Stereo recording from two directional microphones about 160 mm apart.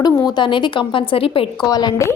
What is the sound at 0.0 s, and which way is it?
A woman's voice, 25° left (ahead or behind).